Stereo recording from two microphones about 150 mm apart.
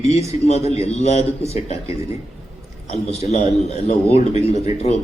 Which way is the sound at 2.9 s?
50° left (ahead or behind).